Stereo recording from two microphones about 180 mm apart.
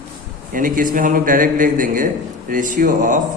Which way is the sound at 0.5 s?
50° right (ahead or behind).